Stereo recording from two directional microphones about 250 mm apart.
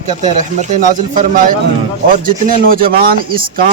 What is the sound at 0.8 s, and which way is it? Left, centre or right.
Speech, right.